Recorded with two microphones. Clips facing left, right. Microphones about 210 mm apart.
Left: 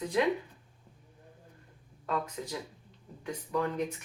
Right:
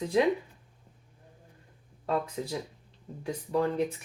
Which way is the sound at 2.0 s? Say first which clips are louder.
Right 4 dB; 30° right (ahead or behind).